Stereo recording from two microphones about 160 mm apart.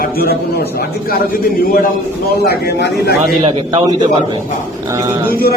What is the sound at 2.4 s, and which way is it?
Speech, 85° left.